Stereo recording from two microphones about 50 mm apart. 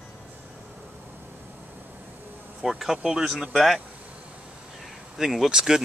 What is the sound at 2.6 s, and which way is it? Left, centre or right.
Speech, centre.